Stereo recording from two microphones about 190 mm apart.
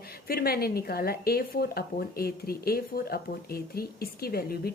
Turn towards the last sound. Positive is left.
turn(degrees=55)  # may be behind; listen again after turning